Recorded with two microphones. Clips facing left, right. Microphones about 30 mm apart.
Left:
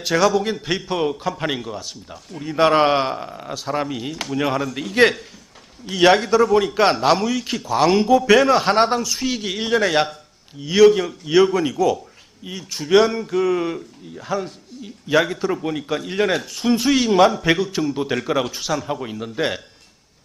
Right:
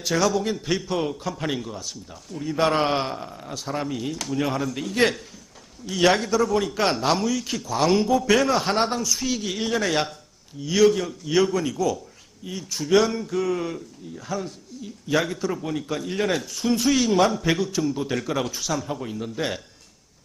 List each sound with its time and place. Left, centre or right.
0.0 s a man's voice: centre
12.7 s a man's voice: left